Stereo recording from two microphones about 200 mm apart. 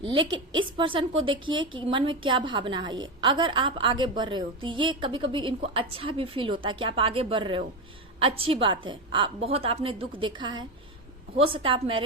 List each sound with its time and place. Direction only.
0.0 s a woman's voice: 25° right (ahead or behind)